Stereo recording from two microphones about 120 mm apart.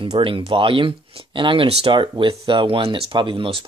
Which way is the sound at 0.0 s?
50° right (ahead or behind).